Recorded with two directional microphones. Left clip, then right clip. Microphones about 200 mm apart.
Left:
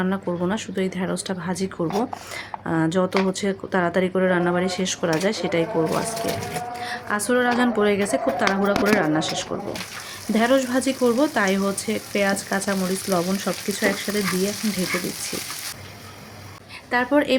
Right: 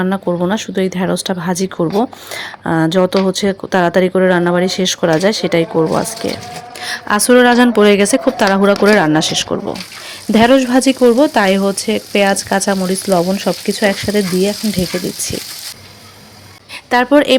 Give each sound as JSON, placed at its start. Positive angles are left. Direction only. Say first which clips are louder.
{"t": 0.0, "sound": "speech", "louder": "right 9 dB", "side_deg": -30}
{"t": 6.8, "sound": "speech", "louder": "right 13 dB", "side_deg": -45}
{"t": 16.9, "sound": "speech", "louder": "right 9 dB", "side_deg": -40}